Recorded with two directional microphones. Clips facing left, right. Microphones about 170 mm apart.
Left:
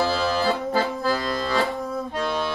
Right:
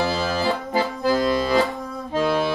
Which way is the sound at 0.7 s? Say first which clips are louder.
Right 1 dB; 15° right (ahead or behind).